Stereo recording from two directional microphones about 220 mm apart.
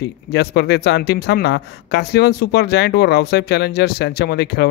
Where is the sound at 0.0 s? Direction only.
50° left (ahead or behind).